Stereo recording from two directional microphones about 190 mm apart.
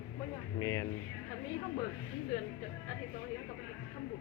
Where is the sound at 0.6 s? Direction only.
15° left (ahead or behind).